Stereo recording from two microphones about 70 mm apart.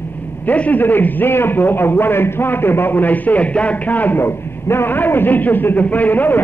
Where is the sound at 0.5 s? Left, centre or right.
Left.